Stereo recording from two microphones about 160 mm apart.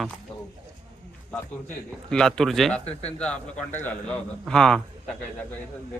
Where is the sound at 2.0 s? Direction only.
5° left (ahead or behind).